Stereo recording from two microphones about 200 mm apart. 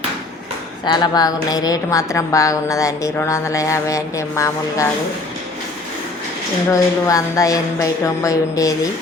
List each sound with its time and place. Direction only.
0.9 s a woman's voice: 20° left (ahead or behind)
6.7 s a woman's voice: 15° left (ahead or behind)